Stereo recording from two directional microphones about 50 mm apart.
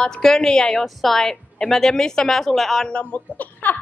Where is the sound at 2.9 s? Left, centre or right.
Left.